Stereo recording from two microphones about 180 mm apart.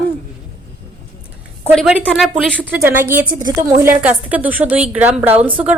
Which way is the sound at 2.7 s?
10° right (ahead or behind).